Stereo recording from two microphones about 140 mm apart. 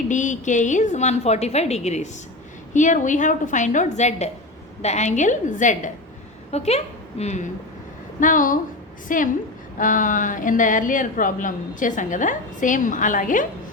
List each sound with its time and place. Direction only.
0.1 s a woman's voice: 60° left (ahead or behind)
6.5 s a woman's voice: 50° left (ahead or behind)
8.2 s a woman's voice: 70° left (ahead or behind)